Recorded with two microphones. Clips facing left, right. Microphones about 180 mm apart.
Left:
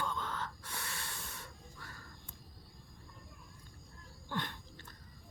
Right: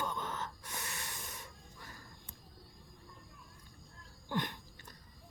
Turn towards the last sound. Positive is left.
turn(degrees=-15)  # may be behind; listen again after turning